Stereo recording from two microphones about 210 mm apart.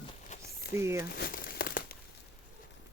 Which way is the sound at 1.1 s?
45° left (ahead or behind).